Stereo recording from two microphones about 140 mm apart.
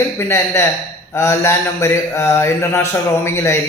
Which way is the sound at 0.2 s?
20° left (ahead or behind).